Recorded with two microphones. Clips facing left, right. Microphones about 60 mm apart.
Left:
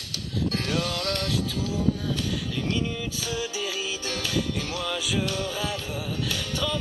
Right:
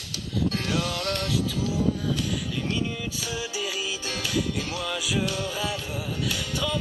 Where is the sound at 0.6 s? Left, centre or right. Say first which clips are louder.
Even; right.